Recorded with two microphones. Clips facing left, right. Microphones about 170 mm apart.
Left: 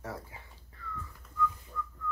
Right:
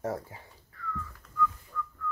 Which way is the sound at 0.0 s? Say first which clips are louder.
Right 8 dB; 45° right (ahead or behind).